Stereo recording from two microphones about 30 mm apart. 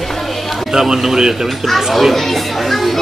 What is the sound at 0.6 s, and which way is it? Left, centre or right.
A man's voice, right.